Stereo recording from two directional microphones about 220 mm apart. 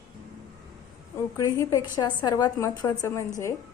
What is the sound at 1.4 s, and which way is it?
A woman's voice, 15° left (ahead or behind).